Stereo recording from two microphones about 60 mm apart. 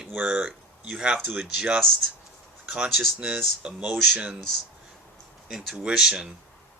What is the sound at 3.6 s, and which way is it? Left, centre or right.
Speech, centre.